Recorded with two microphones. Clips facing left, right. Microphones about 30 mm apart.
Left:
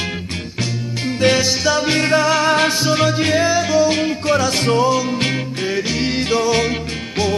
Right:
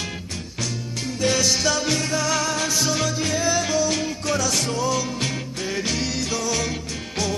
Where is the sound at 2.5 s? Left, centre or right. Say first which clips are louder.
Left 9 dB; left.